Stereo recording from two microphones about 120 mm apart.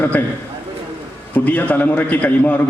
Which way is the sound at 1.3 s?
15° left (ahead or behind).